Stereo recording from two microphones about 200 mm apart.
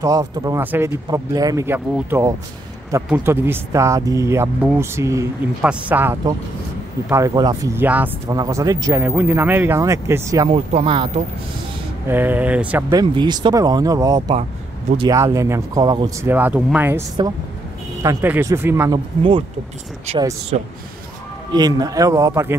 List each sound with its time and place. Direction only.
0.0 s speech: 15° right (ahead or behind)
10.5 s speech: 30° right (ahead or behind)
12.1 s speech: 10° right (ahead or behind)
12.9 s speech: 20° right (ahead or behind)
18.0 s speech: 10° right (ahead or behind)
20.2 s speech: 20° right (ahead or behind)